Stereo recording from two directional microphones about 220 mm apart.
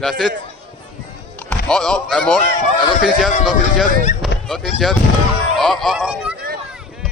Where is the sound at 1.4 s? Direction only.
5° left (ahead or behind).